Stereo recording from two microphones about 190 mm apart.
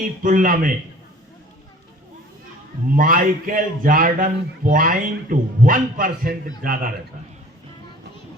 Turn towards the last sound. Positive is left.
turn(degrees=-45)  # may be behind; listen again after turning